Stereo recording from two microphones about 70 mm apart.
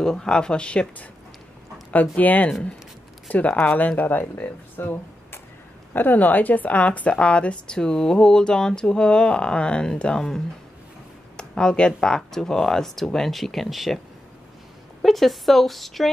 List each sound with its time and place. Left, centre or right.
0.0 s a woman's voice: centre